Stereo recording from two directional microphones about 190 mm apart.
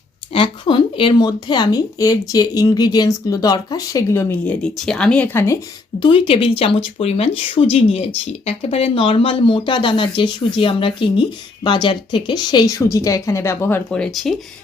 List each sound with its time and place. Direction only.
0.3 s speech: 25° left (ahead or behind)
6.0 s speech: 25° left (ahead or behind); by 14.3 s centre (ahead or behind)